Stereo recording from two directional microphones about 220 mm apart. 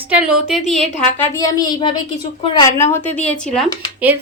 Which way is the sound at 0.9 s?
30° left (ahead or behind).